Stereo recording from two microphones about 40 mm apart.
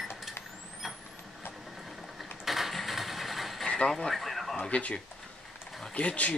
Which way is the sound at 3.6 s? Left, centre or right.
Centre.